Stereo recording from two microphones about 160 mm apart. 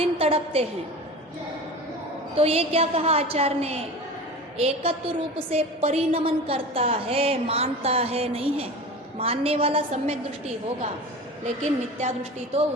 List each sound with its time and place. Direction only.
0.0 s a woman's voice: 35° right (ahead or behind)
2.3 s a woman's voice: 40° right (ahead or behind)